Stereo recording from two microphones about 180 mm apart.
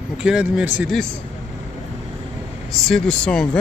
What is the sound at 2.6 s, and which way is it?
Speech, centre (ahead or behind).